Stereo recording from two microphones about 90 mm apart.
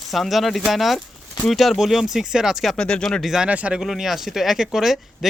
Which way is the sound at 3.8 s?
Centre (ahead or behind).